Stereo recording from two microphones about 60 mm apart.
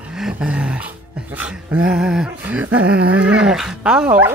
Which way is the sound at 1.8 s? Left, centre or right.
Centre.